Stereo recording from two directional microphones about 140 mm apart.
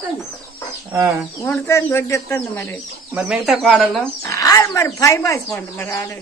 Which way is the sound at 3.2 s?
5° right (ahead or behind).